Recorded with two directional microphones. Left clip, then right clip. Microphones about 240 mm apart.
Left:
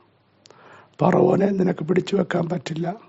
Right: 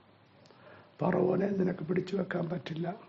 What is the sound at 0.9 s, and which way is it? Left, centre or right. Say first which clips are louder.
Speech: left 11 dB; left.